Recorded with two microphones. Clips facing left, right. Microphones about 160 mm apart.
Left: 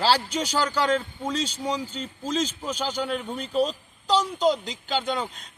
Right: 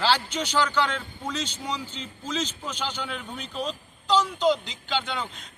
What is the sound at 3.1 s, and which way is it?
Speech, 40° left (ahead or behind).